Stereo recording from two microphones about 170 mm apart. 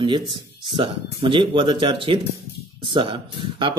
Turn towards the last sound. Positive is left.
turn(degrees=-30)  # may be behind; listen again after turning